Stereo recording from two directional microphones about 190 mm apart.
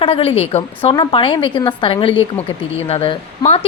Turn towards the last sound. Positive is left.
turn(degrees=30)  # may be behind; listen again after turning